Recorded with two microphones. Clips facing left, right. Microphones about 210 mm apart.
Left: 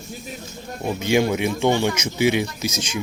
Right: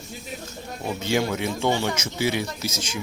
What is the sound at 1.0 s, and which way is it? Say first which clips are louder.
A man's voice: left 5 dB; 15° left (ahead or behind).